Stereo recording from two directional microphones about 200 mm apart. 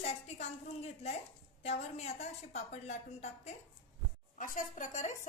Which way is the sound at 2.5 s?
35° left (ahead or behind).